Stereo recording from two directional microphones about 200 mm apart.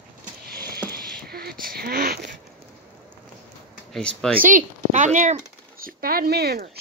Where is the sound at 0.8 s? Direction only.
50° right (ahead or behind).